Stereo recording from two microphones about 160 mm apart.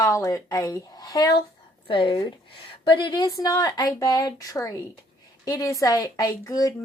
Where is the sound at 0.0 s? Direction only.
20° left (ahead or behind).